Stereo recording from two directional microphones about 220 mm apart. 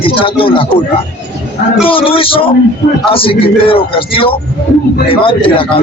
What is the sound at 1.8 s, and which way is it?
Speech, 25° left (ahead or behind).